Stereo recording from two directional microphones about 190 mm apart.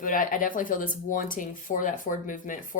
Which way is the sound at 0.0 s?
45° left (ahead or behind).